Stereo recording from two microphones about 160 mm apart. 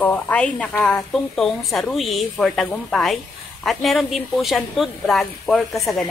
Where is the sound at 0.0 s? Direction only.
10° left (ahead or behind).